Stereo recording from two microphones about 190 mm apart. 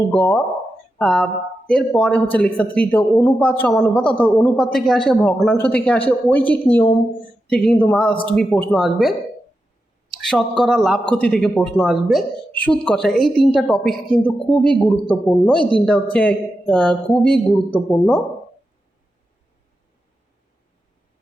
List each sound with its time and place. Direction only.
0.1 s a man's voice: 10° left (ahead or behind)